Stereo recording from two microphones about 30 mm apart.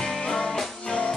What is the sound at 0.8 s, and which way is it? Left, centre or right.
Music, left.